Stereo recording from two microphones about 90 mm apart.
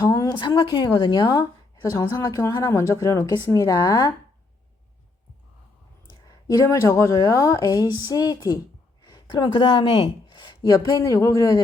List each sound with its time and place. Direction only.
0.1 s a sound: 40° left (ahead or behind)
0.3 s a woman's voice: 60° left (ahead or behind)
6.7 s a woman's voice: 35° left (ahead or behind)